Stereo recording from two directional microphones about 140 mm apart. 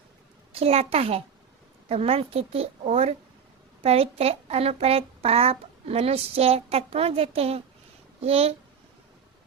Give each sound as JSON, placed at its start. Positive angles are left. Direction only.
{"t": 0.5, "sound": "a child's voice", "side_deg": -45}